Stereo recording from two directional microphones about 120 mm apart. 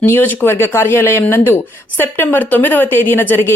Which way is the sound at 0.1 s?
15° left (ahead or behind).